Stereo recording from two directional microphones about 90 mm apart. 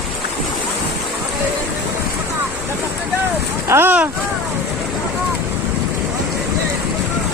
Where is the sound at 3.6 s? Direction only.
25° right (ahead or behind).